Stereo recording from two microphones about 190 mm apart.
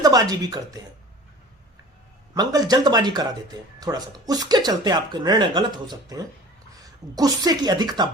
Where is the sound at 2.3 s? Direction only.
20° right (ahead or behind).